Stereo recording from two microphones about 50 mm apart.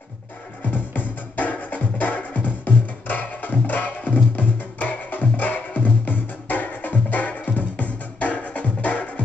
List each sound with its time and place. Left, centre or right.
0.7 s music: left